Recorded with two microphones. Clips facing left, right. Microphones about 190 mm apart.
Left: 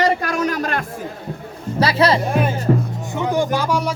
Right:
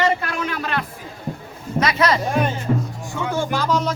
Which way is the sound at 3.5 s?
10° left (ahead or behind).